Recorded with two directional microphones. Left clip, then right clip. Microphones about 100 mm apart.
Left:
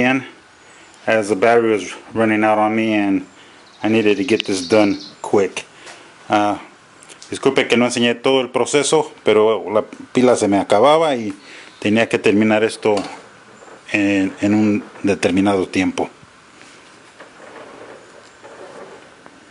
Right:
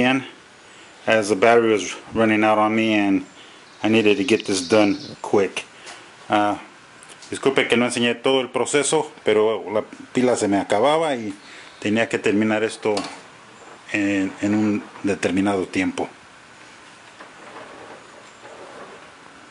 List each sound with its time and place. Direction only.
0.0 s speech: 5° right (ahead or behind); by 16.1 s 20° left (ahead or behind)